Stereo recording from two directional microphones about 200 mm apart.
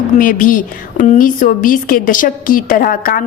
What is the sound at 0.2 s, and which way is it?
A woman's voice, 45° left (ahead or behind).